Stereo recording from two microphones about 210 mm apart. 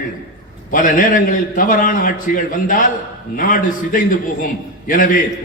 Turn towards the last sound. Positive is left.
turn(degrees=40)  # may be behind; listen again after turning